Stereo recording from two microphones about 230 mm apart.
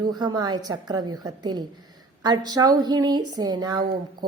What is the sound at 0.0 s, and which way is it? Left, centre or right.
A woman's voice, centre.